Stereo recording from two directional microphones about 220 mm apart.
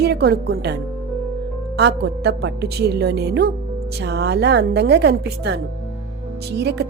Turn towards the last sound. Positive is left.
turn(degrees=-50)  # may be behind; listen again after turning